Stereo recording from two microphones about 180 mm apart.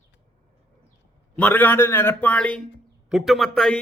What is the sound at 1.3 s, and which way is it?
A man's voice, 10° left (ahead or behind).